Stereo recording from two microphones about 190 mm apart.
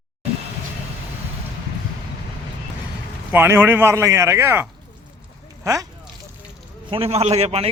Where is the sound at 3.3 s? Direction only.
10° right (ahead or behind).